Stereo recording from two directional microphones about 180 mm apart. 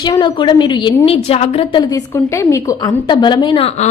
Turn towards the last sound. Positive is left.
turn(degrees=35)  # may be behind; listen again after turning